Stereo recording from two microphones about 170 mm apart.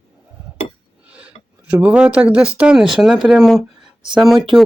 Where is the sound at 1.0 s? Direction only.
10° right (ahead or behind).